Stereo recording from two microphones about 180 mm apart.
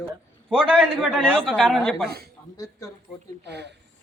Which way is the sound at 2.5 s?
20° left (ahead or behind).